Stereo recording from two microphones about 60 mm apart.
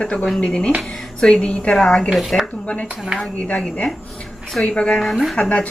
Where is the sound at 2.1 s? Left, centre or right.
Centre.